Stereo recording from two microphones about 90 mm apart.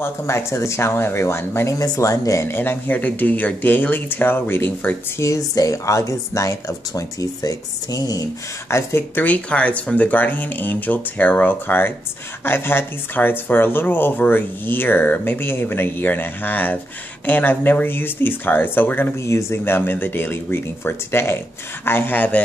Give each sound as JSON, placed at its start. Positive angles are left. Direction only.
{"t": 0.0, "sound": "speech", "side_deg": 30}
{"t": 1.8, "sound": "speech", "side_deg": 40}
{"t": 5.3, "sound": "speech", "side_deg": 40}